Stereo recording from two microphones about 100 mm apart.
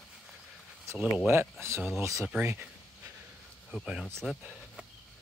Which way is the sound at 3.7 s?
5° right (ahead or behind).